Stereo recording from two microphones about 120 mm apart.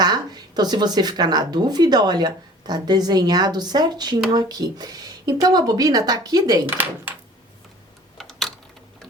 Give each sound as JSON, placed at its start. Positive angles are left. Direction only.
{"t": 0.0, "sound": "a woman's voice", "side_deg": -35}
{"t": 6.7, "sound": "speech", "side_deg": -15}
{"t": 8.2, "sound": "typing", "side_deg": 0}